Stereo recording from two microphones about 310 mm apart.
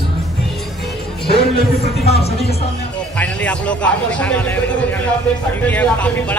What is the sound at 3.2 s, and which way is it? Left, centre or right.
Speech, centre.